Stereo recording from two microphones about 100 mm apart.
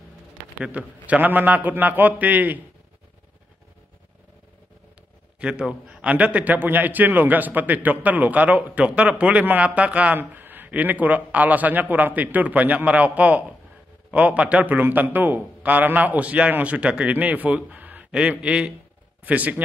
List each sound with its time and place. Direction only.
0.6 s a man's voice: 15° right (ahead or behind)
5.4 s a man's voice: 10° right (ahead or behind)